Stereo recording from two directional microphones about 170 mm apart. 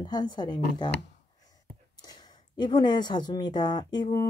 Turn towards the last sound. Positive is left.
turn(degrees=25)  # may be behind; listen again after turning